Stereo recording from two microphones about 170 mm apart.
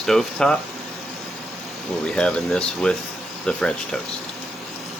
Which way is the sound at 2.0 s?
5° left (ahead or behind).